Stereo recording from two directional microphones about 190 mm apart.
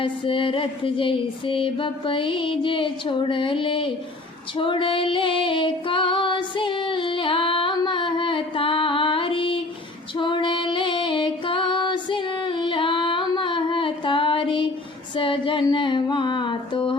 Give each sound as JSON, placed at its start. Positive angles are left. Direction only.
{"t": 0.0, "sound": "a sound", "side_deg": 30}
{"t": 4.5, "sound": "female singing", "side_deg": 25}
{"t": 15.1, "sound": "music", "side_deg": 25}